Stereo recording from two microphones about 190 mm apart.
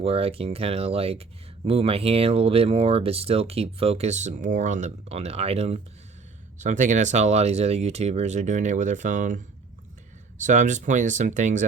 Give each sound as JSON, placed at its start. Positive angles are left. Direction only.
{"t": 0.0, "sound": "speech", "side_deg": -30}